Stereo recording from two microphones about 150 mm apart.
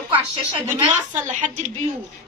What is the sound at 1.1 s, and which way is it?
Speech, 55° right (ahead or behind).